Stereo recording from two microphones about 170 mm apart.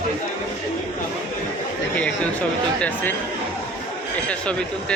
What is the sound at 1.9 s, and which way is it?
Speech, 10° left (ahead or behind).